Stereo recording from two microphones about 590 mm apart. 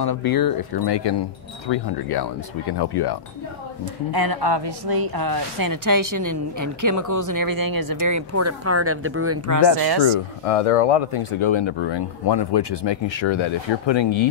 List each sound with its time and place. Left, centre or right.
0.0 s speech: left
4.1 s a woman's voice: right
10.0 s speech: left